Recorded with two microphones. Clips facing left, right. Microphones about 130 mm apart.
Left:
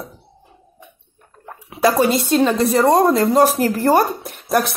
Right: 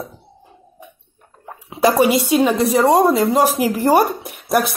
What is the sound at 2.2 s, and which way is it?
Speech, 10° right (ahead or behind).